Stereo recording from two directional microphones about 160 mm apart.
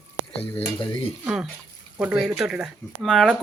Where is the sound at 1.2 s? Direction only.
5° right (ahead or behind).